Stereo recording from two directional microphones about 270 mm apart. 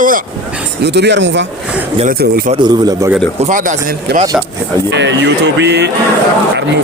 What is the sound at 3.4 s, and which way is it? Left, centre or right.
Speech, right.